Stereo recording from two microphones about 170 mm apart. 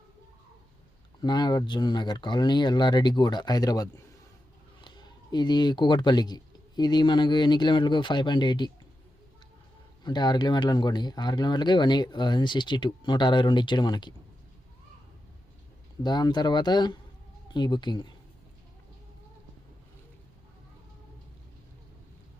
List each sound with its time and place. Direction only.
1.2 s speech: 25° left (ahead or behind)
10.0 s speech: 25° left (ahead or behind)
16.0 s speech: 25° left (ahead or behind)